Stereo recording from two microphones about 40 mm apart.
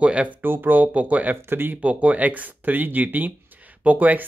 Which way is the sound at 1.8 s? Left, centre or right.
Right.